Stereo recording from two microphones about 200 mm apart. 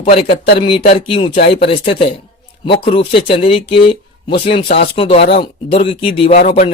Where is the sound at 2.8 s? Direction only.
25° left (ahead or behind).